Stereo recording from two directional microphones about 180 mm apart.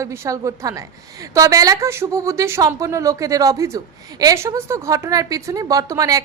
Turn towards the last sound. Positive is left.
turn(degrees=-20)  # may be behind; listen again after turning